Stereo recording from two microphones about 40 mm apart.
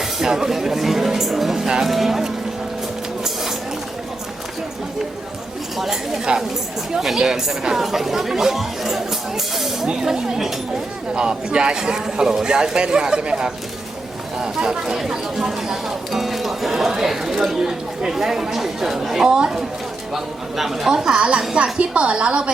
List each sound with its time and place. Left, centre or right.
0.0 s speech: centre
5.7 s a woman's voice: centre
6.3 s speech: right
11.1 s a man's voice: right; by 20.9 s centre
20.9 s speech: centre
21.5 s speech: right